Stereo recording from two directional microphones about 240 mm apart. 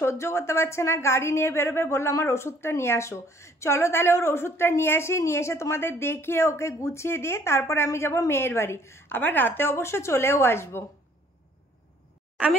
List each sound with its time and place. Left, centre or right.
0.0 s a woman's voice: centre